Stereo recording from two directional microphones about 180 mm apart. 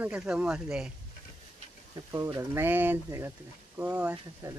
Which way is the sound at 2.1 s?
15° right (ahead or behind).